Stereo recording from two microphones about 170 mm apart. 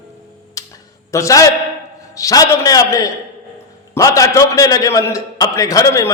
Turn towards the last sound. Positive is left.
turn(degrees=20)  # may be behind; listen again after turning